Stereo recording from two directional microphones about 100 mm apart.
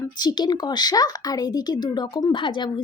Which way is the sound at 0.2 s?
45° left (ahead or behind).